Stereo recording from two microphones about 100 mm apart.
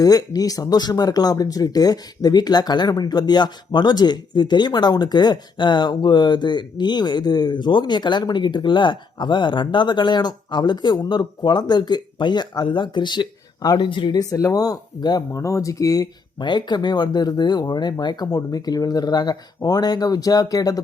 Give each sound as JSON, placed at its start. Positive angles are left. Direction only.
{"t": 0.0, "sound": "speech", "side_deg": 40}
{"t": 14.2, "sound": "speech", "side_deg": 35}